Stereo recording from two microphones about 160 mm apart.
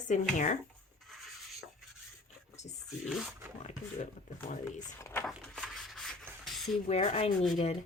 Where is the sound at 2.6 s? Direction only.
45° left (ahead or behind).